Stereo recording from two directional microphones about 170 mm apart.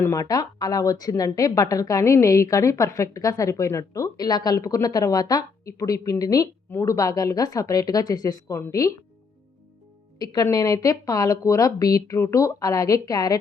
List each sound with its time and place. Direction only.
0.0 s a woman's voice: 20° left (ahead or behind)
10.2 s a woman's voice: 20° left (ahead or behind)